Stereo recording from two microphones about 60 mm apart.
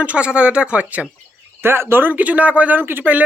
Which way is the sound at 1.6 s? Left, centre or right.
Right.